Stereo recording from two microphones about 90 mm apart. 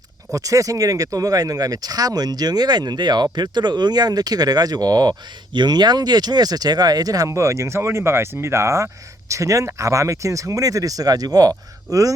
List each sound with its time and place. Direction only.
0.3 s speech: 40° right (ahead or behind)